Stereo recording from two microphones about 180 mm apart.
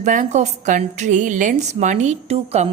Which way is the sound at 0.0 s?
45° right (ahead or behind).